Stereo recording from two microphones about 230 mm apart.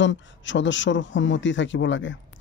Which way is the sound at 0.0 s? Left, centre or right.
Left.